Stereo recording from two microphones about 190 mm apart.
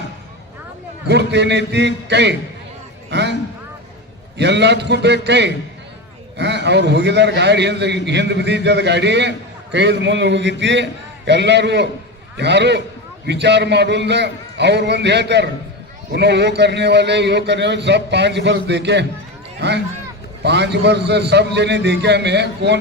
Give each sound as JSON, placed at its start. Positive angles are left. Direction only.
{"t": 1.0, "sound": "a man's voice", "side_deg": -65}
{"t": 4.4, "sound": "a man's voice", "side_deg": -65}